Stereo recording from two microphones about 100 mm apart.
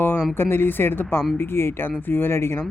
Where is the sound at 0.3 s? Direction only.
20° left (ahead or behind).